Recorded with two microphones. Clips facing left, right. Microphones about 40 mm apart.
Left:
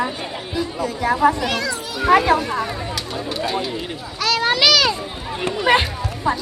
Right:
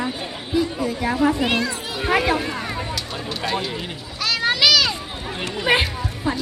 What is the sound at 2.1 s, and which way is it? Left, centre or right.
Speech, centre.